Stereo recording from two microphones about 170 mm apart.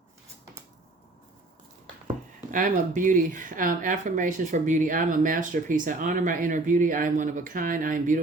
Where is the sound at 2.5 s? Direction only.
50° right (ahead or behind).